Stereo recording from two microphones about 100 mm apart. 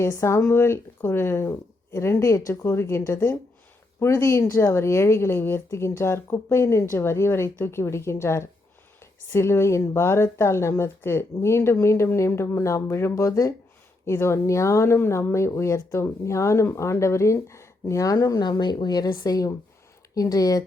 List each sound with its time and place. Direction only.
0.0 s speech: 30° left (ahead or behind)